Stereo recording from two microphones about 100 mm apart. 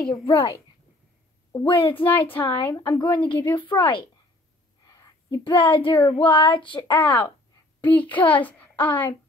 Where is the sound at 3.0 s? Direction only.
55° left (ahead or behind).